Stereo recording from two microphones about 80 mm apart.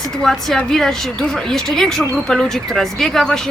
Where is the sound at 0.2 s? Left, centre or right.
Centre.